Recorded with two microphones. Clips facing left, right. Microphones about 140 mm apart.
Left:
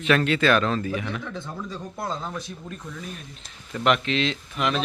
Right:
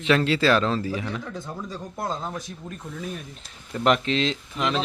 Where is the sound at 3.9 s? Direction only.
30° right (ahead or behind).